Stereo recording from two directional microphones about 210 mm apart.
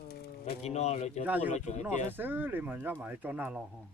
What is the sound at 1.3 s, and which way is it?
Speech, 10° right (ahead or behind).